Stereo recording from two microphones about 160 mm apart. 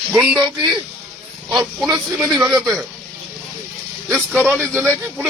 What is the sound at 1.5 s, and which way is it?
Speech, centre (ahead or behind).